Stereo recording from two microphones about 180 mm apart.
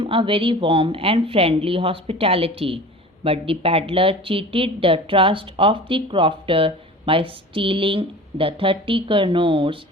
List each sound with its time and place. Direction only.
0.0 s speech: 30° right (ahead or behind)